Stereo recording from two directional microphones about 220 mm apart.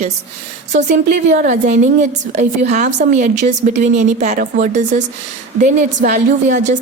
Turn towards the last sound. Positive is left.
turn(degrees=-35)  # may be behind; listen again after turning